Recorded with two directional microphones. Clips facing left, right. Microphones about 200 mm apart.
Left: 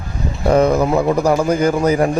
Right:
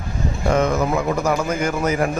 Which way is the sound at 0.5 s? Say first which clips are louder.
Left 6 dB; 35° left (ahead or behind).